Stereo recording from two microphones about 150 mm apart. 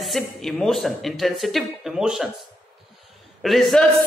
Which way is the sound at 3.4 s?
Centre (ahead or behind).